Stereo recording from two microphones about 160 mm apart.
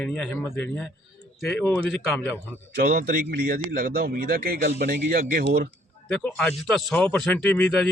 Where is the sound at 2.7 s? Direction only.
70° right (ahead or behind).